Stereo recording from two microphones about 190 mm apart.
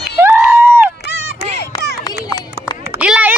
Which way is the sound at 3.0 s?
5° right (ahead or behind).